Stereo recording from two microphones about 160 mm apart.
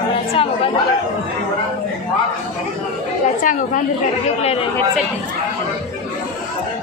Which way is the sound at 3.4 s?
50° left (ahead or behind).